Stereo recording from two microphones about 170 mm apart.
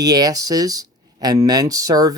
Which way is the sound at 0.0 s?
20° right (ahead or behind).